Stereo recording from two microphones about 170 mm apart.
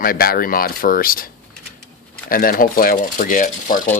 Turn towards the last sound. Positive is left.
turn(degrees=50)  # may be behind; listen again after turning